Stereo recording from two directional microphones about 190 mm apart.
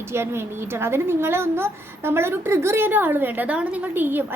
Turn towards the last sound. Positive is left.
turn(degrees=-10)  # may be behind; listen again after turning